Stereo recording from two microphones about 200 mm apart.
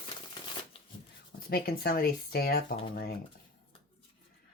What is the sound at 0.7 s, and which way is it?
Shuffling cards, 25° left (ahead or behind).